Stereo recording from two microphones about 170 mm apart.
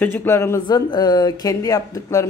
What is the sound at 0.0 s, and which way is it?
A man's voice, 10° left (ahead or behind).